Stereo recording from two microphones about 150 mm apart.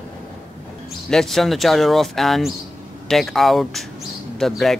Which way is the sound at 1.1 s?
Centre (ahead or behind).